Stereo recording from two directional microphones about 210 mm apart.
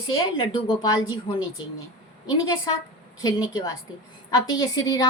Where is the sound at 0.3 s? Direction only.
20° left (ahead or behind).